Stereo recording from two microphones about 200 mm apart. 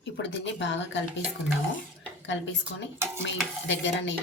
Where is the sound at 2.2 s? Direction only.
65° left (ahead or behind).